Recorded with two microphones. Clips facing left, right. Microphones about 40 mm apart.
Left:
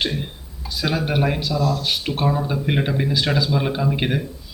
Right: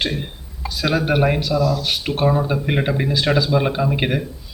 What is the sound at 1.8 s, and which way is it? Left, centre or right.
Speech, centre.